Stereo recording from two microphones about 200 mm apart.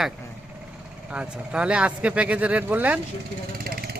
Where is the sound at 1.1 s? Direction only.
5° right (ahead or behind).